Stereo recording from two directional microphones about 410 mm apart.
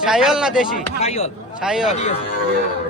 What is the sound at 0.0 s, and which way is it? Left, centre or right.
Speech, centre.